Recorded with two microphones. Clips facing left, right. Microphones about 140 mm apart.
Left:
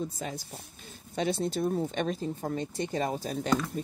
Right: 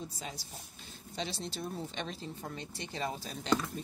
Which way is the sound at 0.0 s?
50° left (ahead or behind).